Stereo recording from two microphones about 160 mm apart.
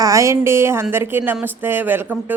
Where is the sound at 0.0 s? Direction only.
20° right (ahead or behind).